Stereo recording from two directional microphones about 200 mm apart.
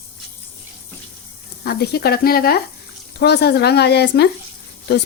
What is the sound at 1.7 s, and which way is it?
A woman's voice, 50° left (ahead or behind).